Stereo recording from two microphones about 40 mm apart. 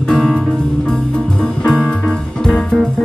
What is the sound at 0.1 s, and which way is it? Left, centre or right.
Music, centre.